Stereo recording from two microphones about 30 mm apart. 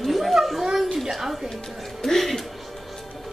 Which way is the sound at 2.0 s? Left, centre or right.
Centre.